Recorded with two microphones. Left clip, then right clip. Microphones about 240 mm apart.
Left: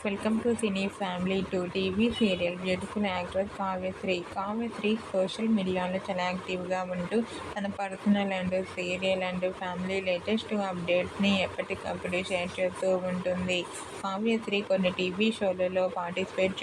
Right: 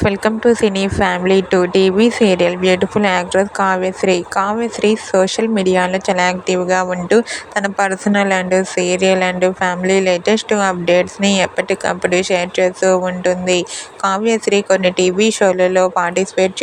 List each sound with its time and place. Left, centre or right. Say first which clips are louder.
0.0 s speech: right 16 dB; right